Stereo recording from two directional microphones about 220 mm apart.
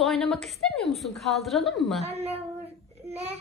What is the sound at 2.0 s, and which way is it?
A woman's voice, 30° right (ahead or behind).